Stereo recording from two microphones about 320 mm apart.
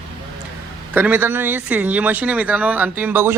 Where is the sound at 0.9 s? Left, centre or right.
Centre.